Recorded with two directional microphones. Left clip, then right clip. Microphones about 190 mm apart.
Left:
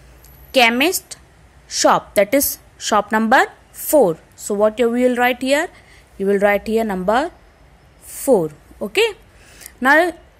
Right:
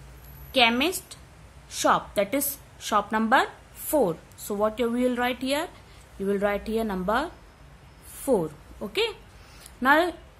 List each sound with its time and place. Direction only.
0.5 s a woman's voice: 30° left (ahead or behind)
8.3 s a woman's voice: 25° left (ahead or behind)